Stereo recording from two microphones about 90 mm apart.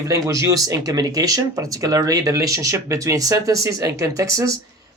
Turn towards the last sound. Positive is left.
turn(degrees=-35)  # may be behind; listen again after turning